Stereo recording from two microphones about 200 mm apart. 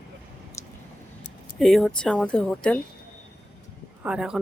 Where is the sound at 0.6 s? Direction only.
15° left (ahead or behind).